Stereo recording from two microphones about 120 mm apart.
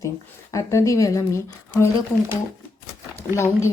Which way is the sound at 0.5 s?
25° left (ahead or behind).